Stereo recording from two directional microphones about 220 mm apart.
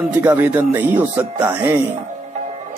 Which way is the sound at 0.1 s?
10° right (ahead or behind).